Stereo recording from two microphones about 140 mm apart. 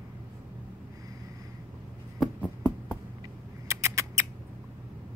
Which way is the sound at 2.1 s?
10° left (ahead or behind).